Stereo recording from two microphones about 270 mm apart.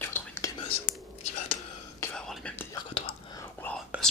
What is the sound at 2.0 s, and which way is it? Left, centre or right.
Whispering, centre.